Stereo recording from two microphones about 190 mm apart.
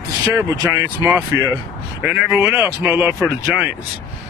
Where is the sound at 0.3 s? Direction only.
15° right (ahead or behind).